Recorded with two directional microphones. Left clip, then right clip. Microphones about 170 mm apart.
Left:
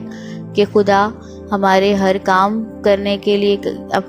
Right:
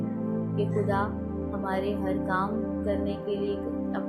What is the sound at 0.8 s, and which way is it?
Speech, 65° left (ahead or behind).